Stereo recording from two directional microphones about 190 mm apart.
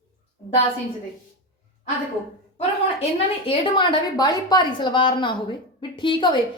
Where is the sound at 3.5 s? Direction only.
25° left (ahead or behind).